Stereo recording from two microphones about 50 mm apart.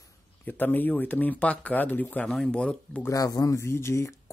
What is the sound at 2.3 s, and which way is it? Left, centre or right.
Speech, centre.